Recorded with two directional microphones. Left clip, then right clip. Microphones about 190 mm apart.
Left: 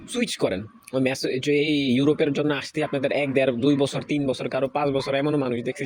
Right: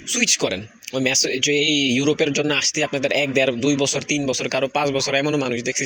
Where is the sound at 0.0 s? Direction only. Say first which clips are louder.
Right 5 dB; 10° left (ahead or behind).